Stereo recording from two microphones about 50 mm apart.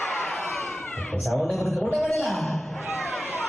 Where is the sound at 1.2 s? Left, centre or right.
Centre.